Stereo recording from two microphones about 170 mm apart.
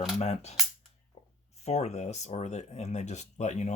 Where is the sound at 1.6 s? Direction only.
40° left (ahead or behind).